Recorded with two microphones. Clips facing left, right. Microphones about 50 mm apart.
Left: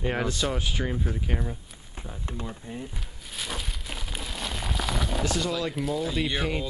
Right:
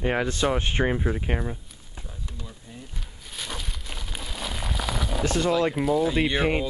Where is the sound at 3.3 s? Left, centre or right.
Centre.